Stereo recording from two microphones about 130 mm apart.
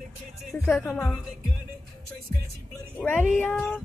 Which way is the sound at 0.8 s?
15° left (ahead or behind).